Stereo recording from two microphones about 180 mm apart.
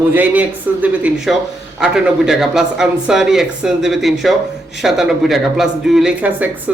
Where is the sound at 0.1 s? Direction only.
10° right (ahead or behind).